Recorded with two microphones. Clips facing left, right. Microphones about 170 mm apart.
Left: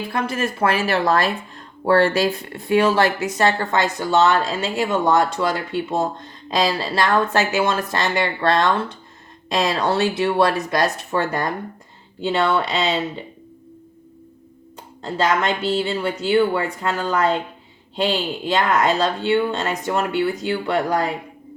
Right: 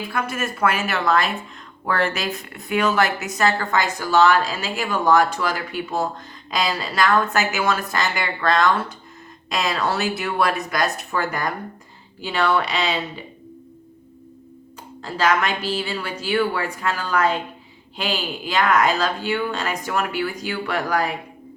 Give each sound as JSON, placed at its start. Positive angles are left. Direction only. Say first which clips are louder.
{"t": 0.0, "sound": "speech", "louder": "left 3 dB", "side_deg": 30}
{"t": 15.0, "sound": "speech", "louder": "left 1 dB", "side_deg": 25}